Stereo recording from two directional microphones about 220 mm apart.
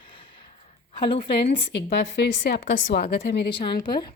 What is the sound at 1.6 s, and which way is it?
Speech, 50° left (ahead or behind).